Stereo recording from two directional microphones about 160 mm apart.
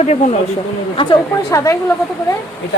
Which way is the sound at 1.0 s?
35° left (ahead or behind).